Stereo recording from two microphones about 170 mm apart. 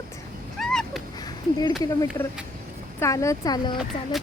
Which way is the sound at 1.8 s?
20° left (ahead or behind).